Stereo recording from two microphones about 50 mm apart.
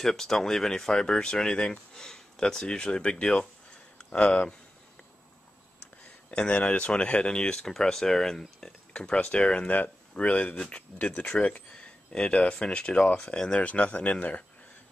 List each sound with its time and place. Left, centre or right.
0.0 s speech: centre; by 4.5 s left
6.5 s speech: left